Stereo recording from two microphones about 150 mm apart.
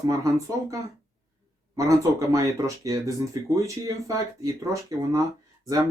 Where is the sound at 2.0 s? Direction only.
20° right (ahead or behind).